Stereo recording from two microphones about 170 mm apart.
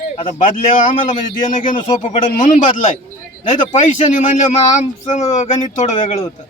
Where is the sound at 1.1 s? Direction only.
50° left (ahead or behind).